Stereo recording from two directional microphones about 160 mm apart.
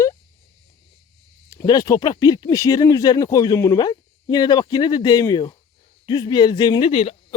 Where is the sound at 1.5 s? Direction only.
20° left (ahead or behind).